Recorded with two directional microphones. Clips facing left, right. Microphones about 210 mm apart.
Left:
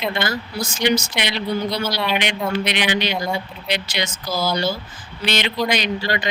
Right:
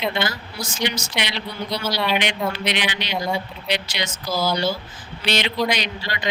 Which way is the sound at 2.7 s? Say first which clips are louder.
Left 4 dB; 50° left (ahead or behind).